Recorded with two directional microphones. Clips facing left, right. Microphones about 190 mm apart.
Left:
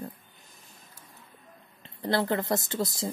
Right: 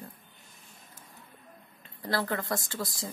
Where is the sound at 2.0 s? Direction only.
25° left (ahead or behind).